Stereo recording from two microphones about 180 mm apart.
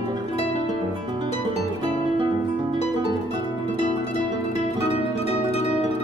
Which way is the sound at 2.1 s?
25° right (ahead or behind).